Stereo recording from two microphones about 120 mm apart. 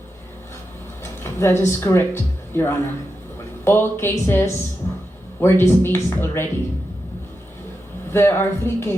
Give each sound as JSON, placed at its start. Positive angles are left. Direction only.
{"t": 1.2, "sound": "speech", "side_deg": 20}
{"t": 8.1, "sound": "speech", "side_deg": 20}